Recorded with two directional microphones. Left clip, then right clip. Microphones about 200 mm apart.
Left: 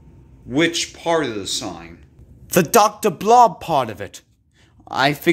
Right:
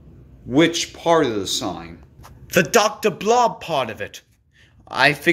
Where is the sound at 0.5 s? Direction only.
10° right (ahead or behind).